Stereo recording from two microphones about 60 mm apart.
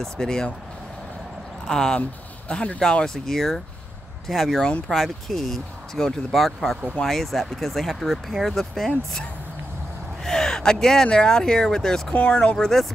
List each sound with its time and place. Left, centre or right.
0.0 s speech: centre
1.7 s speech: centre
2.0 s speech: left; by 9.2 s centre
10.2 s speech: centre
12.1 s speech: left
12.5 s speech: centre